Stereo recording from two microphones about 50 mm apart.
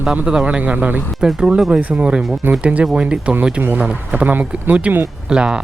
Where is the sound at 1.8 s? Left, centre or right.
Right.